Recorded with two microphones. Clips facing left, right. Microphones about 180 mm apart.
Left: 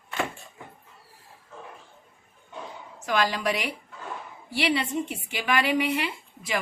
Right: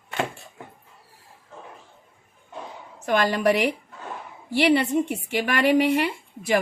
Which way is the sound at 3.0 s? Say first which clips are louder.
Right 5 dB; 50° right (ahead or behind).